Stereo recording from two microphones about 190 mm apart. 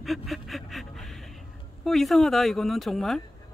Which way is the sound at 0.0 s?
Centre (ahead or behind).